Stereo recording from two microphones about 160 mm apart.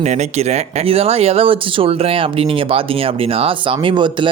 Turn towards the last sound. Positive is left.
turn(degrees=-30)  # may be behind; listen again after turning